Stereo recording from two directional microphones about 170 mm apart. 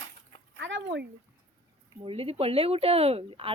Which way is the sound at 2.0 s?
35° right (ahead or behind).